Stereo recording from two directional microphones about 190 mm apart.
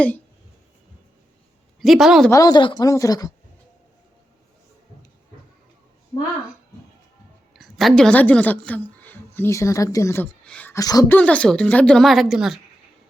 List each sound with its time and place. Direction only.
1.8 s speech: centre (ahead or behind)
2.3 s speech: 20° left (ahead or behind)
7.5 s speech: centre (ahead or behind)
10.8 s speech: 20° left (ahead or behind)
11.2 s speech: 5° left (ahead or behind)